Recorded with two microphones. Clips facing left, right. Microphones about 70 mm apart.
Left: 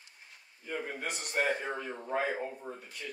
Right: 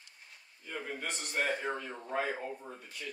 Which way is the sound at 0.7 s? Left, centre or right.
Centre.